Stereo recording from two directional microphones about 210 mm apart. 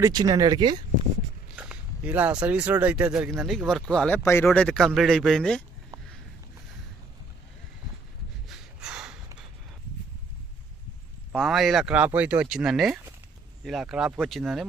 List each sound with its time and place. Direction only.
0.0 s speech: 20° right (ahead or behind)
1.5 s speech: 5° right (ahead or behind)
8.4 s snort: centre (ahead or behind)
11.3 s speech: centre (ahead or behind)